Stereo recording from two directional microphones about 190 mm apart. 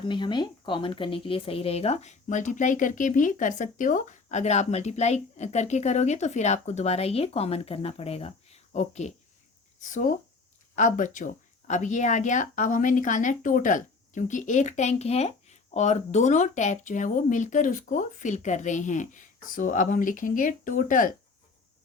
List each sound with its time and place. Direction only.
0.0 s speech: 25° left (ahead or behind); by 21.1 s 45° left (ahead or behind)